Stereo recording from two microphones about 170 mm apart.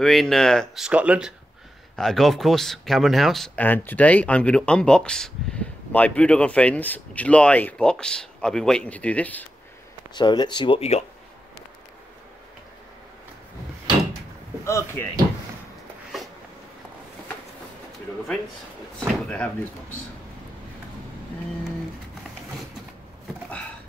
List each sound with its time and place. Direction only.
0.0 s speech: centre (ahead or behind)
10.1 s speech: 25° left (ahead or behind)
14.6 s speech: 15° left (ahead or behind)
18.9 s speech: 5° left (ahead or behind)